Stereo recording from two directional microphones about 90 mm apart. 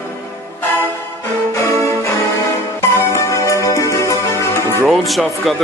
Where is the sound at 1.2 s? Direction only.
35° left (ahead or behind).